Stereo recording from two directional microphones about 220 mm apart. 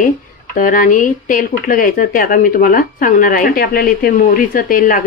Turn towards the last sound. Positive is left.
turn(degrees=40)  # may be behind; listen again after turning